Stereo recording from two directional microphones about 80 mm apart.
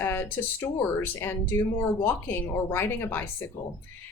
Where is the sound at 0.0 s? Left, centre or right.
Left.